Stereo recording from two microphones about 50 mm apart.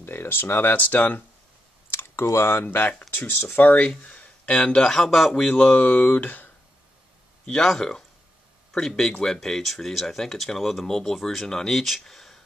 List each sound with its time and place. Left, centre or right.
0.0 s speech: left
0.7 s speech: left
1.9 s clicking: left
2.4 s speech: left
3.1 s speech: left; by 5.4 s centre
5.4 s speech: left
7.4 s speech: centre